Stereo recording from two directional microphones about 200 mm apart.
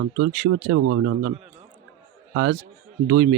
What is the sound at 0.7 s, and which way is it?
Speech, 75° right (ahead or behind).